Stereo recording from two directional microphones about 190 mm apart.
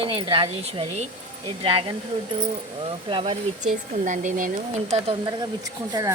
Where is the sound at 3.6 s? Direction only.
40° right (ahead or behind); by 6.1 s 20° right (ahead or behind).